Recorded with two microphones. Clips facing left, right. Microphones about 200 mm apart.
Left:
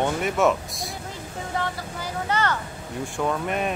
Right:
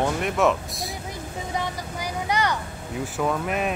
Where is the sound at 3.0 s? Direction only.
5° right (ahead or behind).